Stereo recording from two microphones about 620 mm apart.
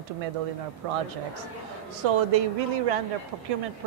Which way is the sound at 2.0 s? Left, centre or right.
Right.